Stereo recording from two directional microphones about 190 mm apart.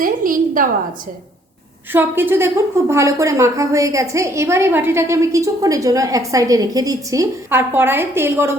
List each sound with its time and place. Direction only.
0.0 s a woman's voice: 45° right (ahead or behind)
1.9 s a woman's voice: 10° right (ahead or behind)